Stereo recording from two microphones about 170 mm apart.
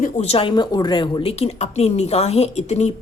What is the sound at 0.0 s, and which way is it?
A woman's voice, 35° left (ahead or behind).